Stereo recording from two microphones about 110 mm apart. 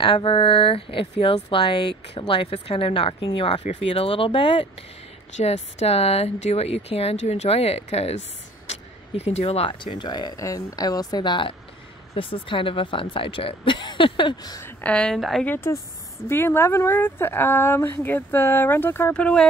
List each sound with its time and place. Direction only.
0.0 s speech: 50° left (ahead or behind)
5.4 s speech: 80° left
8.6 s vehicle: 75° left (ahead or behind)
9.7 s speech: 45° left (ahead or behind)
12.1 s speech: 55° left (ahead or behind); by 14.6 s 40° left (ahead or behind)
14.6 s speech: 15° left (ahead or behind)
15.1 s a woman's voice: centre (ahead or behind)
15.4 s speech: 20° left (ahead or behind)
19.1 s speech: 10° left (ahead or behind)